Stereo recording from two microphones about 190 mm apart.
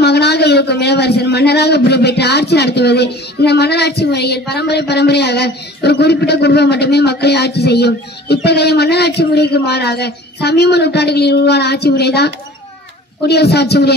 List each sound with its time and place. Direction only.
0.0 s a man's voice: 60° left (ahead or behind)
13.3 s a man's voice: 60° left (ahead or behind)